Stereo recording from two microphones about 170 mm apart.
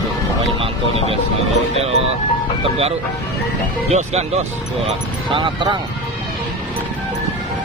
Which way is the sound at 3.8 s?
40° right (ahead or behind).